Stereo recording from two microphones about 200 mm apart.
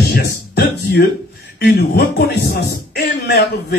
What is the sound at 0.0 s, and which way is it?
Music, 50° left (ahead or behind).